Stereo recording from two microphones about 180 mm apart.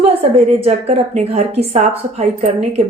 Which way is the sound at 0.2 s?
35° right (ahead or behind).